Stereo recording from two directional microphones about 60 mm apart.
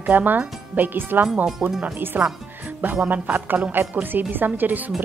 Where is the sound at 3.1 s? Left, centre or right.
Right.